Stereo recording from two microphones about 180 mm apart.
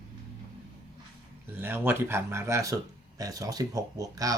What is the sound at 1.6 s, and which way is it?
Speech, 10° right (ahead or behind).